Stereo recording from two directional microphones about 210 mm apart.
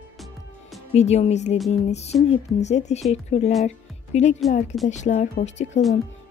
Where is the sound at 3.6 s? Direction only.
35° left (ahead or behind).